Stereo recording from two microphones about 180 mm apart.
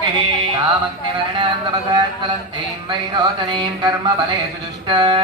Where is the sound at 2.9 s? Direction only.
25° right (ahead or behind).